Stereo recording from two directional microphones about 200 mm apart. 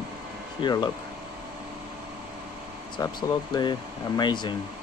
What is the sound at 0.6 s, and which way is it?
Speech, 20° left (ahead or behind).